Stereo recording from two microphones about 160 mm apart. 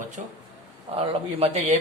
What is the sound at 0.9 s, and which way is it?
Speech, 40° right (ahead or behind).